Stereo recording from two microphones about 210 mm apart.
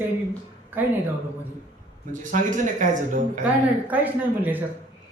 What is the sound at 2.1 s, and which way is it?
Speech, 40° right (ahead or behind).